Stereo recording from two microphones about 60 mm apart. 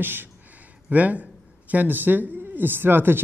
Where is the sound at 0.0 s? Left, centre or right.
Right.